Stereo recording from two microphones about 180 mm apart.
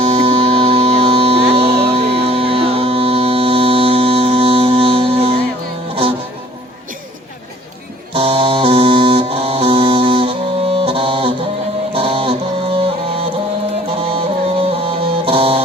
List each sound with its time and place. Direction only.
0.0 s music: 30° right (ahead or behind)
8.1 s music: 30° right (ahead or behind)